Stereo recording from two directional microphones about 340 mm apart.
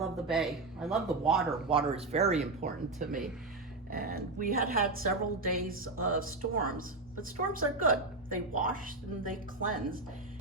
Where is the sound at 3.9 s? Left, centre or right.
Right.